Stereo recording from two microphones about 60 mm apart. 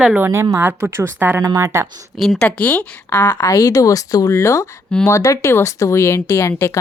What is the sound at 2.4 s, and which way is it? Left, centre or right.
Speech, centre.